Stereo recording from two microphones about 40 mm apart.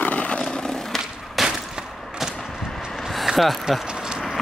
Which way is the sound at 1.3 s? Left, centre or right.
Centre.